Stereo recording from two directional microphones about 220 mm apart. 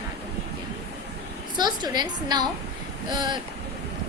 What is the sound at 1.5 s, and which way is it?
A woman's voice, 20° right (ahead or behind).